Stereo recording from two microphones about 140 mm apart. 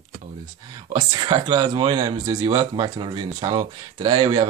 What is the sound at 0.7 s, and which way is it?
Speech, 30° right (ahead or behind).